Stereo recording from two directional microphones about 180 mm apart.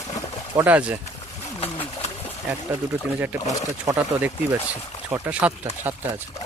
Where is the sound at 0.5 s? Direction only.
10° right (ahead or behind).